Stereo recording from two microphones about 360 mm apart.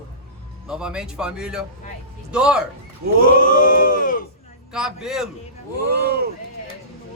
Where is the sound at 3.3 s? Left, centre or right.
Left.